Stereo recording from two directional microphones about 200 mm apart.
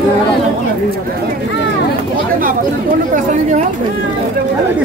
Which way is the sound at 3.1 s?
35° right (ahead or behind).